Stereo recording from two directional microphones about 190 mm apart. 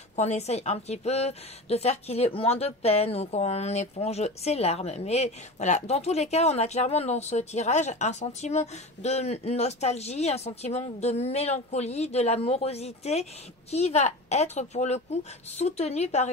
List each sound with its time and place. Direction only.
0.1 s a woman's voice: 35° left (ahead or behind)